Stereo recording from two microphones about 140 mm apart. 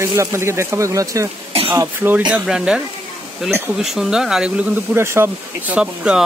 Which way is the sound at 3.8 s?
5° right (ahead or behind).